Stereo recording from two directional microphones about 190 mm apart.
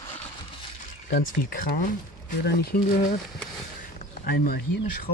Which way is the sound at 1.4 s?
45° left (ahead or behind).